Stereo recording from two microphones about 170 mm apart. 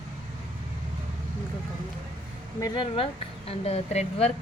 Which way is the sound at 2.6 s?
30° left (ahead or behind).